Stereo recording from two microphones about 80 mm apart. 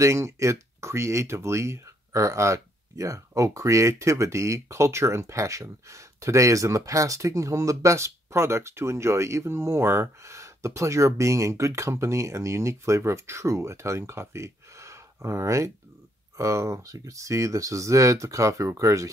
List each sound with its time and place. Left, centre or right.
0.0 s speech: right